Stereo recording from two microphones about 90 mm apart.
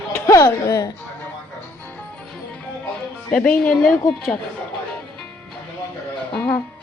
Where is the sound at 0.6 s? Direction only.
45° left (ahead or behind).